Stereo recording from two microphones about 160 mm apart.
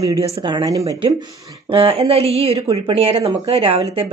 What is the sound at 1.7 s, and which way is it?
Speech, 40° right (ahead or behind).